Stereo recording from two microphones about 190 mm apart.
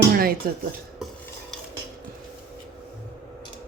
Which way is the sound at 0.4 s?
50° right (ahead or behind).